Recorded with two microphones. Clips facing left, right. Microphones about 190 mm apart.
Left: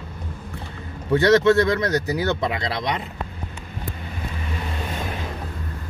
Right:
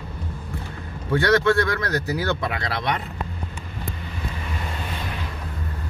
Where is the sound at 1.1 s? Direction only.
20° left (ahead or behind).